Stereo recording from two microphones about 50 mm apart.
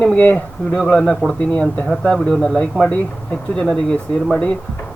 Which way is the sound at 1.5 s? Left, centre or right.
Left.